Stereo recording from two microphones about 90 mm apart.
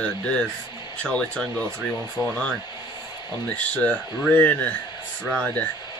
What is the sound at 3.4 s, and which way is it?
Speech, 15° left (ahead or behind).